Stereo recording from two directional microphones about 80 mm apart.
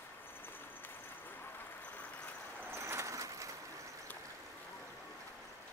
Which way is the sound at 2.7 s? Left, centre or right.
Right.